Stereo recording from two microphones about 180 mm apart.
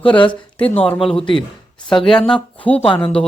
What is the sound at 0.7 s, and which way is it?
Speech, 10° left (ahead or behind).